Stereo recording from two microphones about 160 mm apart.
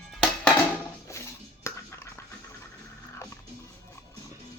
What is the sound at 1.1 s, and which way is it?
Dishes, 20° left (ahead or behind).